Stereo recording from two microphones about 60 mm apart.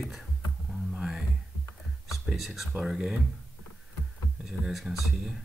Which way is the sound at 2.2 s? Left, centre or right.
Centre.